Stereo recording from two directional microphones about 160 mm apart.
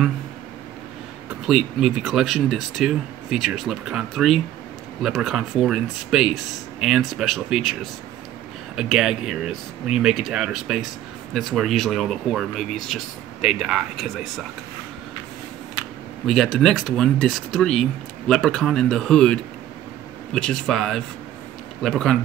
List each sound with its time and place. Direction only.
1.5 s speech: 5° right (ahead or behind)
16.3 s speech: centre (ahead or behind)